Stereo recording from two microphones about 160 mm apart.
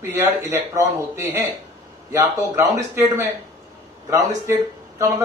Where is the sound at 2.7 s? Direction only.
15° right (ahead or behind).